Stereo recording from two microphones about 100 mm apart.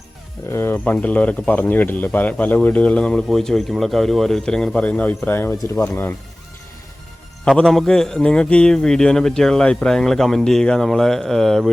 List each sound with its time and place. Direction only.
0.5 s speech: 20° left (ahead or behind)
7.4 s a man's voice: 5° left (ahead or behind)